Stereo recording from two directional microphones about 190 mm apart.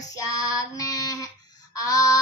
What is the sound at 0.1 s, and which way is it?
Child singing, 20° left (ahead or behind).